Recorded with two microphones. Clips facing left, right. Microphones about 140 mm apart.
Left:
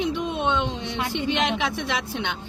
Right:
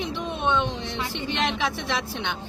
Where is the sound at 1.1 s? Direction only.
15° left (ahead or behind).